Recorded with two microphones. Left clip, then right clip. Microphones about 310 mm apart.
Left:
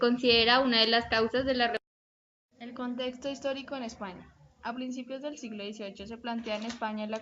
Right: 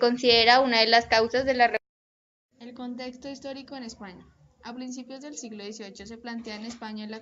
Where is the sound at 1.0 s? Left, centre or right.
Right.